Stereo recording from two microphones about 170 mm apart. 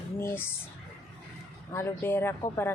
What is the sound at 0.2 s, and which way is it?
Speech, 15° left (ahead or behind).